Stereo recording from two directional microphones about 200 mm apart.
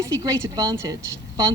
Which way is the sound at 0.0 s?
15° right (ahead or behind).